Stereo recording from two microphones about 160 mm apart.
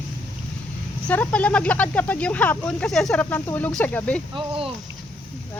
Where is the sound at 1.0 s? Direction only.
10° left (ahead or behind).